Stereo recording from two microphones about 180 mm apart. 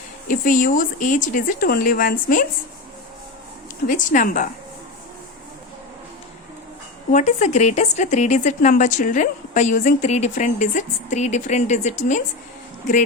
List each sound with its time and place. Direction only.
0.3 s speech: 50° left (ahead or behind)
3.8 s speech: 45° left (ahead or behind)
7.1 s a woman's voice: 45° left (ahead or behind)